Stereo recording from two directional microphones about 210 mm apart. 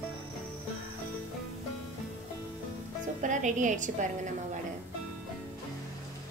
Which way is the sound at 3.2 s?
35° right (ahead or behind).